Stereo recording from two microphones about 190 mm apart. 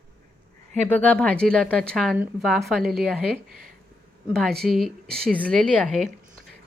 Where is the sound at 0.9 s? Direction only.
10° left (ahead or behind).